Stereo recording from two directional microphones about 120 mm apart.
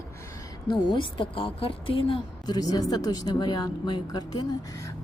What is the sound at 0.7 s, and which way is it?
Speech, 40° left (ahead or behind).